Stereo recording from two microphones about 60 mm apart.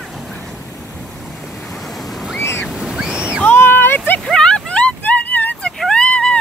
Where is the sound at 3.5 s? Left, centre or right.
Left.